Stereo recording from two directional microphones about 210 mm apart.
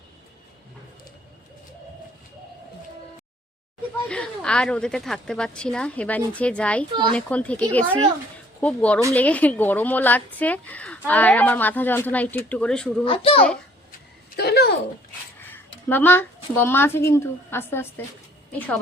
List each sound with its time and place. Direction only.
4.1 s speech: 5° left (ahead or behind)
6.9 s speech: 25° right (ahead or behind)
7.2 s speech: 5° left (ahead or behind)
13.1 s a child's voice: 25° left (ahead or behind)
14.3 s a sound: 50° left (ahead or behind)
15.4 s a woman's voice: 10° left (ahead or behind)